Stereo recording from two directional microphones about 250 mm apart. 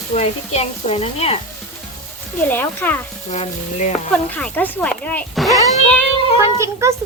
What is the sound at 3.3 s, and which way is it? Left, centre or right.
Speech, left.